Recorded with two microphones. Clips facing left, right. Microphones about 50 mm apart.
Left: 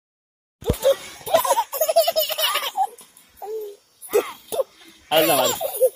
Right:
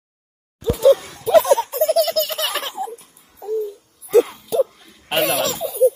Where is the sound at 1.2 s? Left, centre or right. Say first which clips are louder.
Right 5 dB; centre.